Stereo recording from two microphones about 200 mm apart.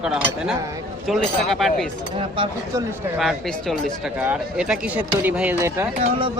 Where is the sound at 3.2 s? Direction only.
Centre (ahead or behind).